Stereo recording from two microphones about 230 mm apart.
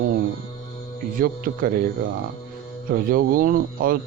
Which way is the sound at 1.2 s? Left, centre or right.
Right.